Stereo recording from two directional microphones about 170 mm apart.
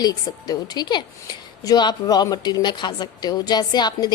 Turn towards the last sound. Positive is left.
turn(degrees=25)  # may be behind; listen again after turning